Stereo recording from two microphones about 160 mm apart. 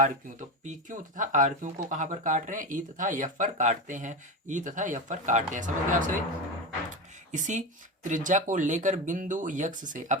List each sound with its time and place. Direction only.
0.0 s speech: 50° right (ahead or behind)
7.3 s speech: 50° right (ahead or behind)